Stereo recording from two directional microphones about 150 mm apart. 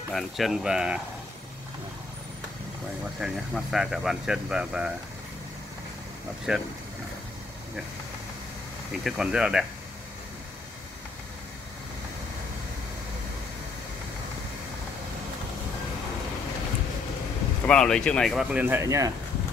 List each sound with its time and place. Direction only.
0.1 s speech: centre (ahead or behind)
3.2 s speech: 5° right (ahead or behind)
6.5 s speech: 5° right (ahead or behind)
9.0 s speech: 5° right (ahead or behind)
17.6 s speech: 5° left (ahead or behind)
18.9 s speech: 20° right (ahead or behind)